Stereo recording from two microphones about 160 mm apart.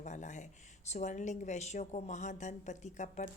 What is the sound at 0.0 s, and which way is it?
Speech, 50° left (ahead or behind).